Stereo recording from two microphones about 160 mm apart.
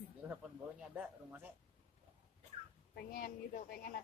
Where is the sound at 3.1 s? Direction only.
70° left (ahead or behind).